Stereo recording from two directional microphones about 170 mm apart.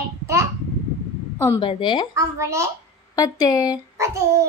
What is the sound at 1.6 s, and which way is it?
Speech, 25° left (ahead or behind).